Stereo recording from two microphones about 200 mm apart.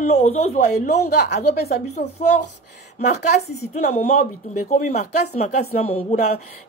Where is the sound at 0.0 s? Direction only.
35° left (ahead or behind).